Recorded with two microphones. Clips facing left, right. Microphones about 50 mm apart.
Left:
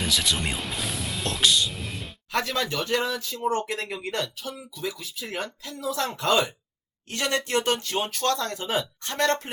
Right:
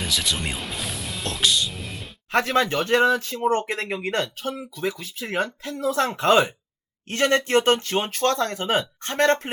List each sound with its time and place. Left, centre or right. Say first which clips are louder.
0.0 s music: even; centre
2.3 s speech: right 6 dB; right